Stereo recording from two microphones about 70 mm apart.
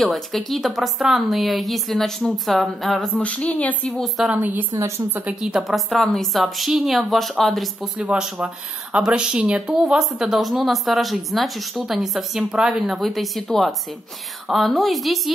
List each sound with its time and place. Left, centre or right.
0.0 s speech: centre
3.2 s a woman's voice: centre
3.9 s speech: centre
4.3 s a woman's voice: right
4.7 s a woman's voice: right
5.4 s speech: centre
8.0 s speech: centre